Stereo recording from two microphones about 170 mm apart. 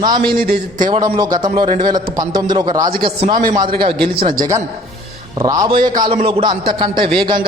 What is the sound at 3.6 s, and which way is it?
Speech, 30° right (ahead or behind).